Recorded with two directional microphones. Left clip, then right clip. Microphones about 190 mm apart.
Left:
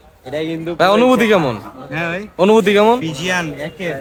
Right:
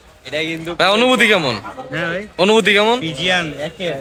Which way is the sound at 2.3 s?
15° left (ahead or behind).